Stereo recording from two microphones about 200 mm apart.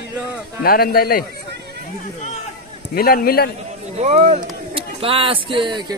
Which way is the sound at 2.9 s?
50° left (ahead or behind).